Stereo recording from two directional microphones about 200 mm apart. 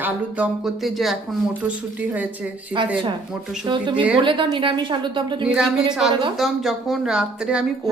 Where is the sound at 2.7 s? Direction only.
25° right (ahead or behind).